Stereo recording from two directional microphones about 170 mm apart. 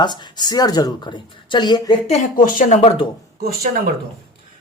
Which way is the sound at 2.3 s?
55° left (ahead or behind).